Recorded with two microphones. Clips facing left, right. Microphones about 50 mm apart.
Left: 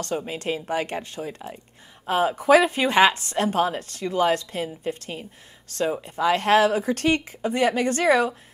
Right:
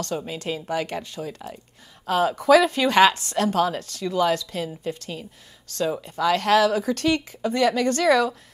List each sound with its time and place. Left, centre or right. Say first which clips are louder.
0.3 s speech: left 1 dB; left